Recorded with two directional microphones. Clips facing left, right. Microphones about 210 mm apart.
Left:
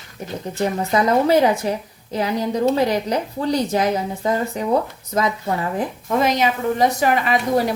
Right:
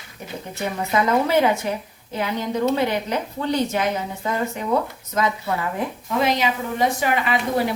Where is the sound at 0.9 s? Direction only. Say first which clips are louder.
Left 3 dB; 35° left (ahead or behind).